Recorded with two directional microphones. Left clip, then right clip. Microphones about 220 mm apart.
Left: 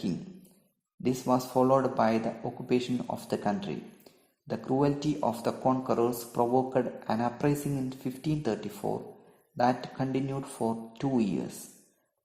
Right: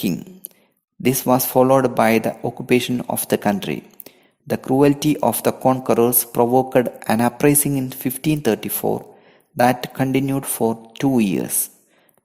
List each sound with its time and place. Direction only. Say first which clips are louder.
1.0 s speech: right 10 dB; 45° right (ahead or behind)